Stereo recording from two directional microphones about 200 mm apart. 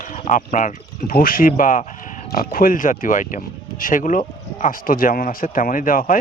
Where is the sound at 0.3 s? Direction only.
40° left (ahead or behind).